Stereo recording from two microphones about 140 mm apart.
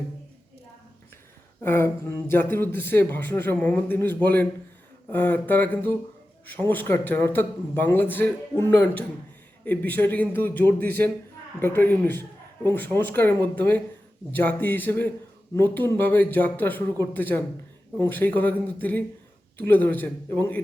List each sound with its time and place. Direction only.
1.6 s speech: 15° left (ahead or behind)